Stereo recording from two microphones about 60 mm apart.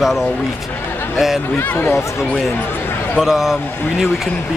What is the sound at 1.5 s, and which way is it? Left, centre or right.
Speech, left.